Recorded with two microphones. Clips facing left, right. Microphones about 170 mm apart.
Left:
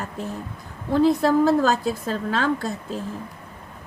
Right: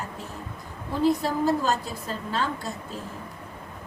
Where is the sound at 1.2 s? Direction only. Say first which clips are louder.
Left 7 dB; 90° left.